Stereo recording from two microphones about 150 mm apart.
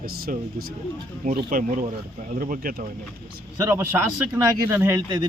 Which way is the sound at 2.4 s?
75° right (ahead or behind).